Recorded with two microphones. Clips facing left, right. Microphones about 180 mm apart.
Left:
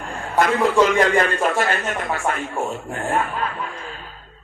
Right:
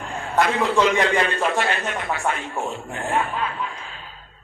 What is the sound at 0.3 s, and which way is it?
A man's voice, 45° left (ahead or behind).